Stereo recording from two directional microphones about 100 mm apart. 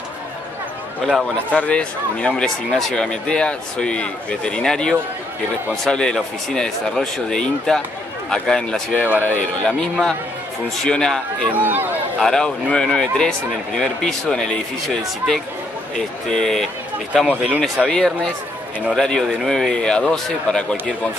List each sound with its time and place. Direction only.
1.0 s speech: 5° left (ahead or behind)
11.5 s speech: 20° right (ahead or behind)
12.2 s speech: 5° left (ahead or behind)
17.8 s speech: 5° left (ahead or behind)